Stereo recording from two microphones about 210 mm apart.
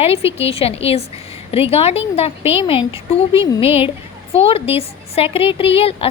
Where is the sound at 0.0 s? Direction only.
30° left (ahead or behind).